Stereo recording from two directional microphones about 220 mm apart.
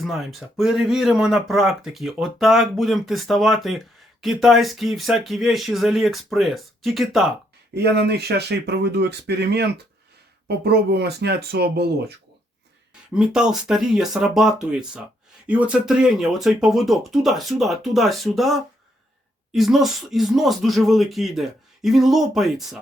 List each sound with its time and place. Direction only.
0.0 s speech: centre (ahead or behind)
7.7 s speech: 50° right (ahead or behind)
13.1 s speech: 5° right (ahead or behind)